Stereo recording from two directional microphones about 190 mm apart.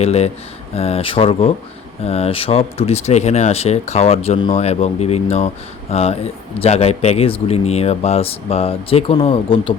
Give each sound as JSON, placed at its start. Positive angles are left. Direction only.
{"t": 0.0, "sound": "speech", "side_deg": 35}